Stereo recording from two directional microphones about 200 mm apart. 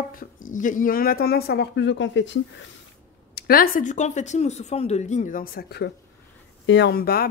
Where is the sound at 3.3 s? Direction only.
45° left (ahead or behind).